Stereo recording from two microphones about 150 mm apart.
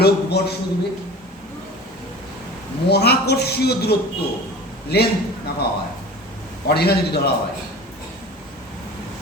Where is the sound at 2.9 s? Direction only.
90° left.